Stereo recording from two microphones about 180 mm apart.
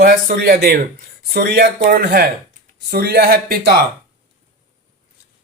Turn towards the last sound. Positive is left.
turn(degrees=-60)  # may be behind; listen again after turning